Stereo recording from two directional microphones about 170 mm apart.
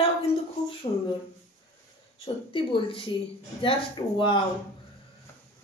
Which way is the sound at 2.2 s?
30° left (ahead or behind).